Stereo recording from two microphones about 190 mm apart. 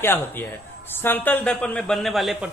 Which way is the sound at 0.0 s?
10° left (ahead or behind).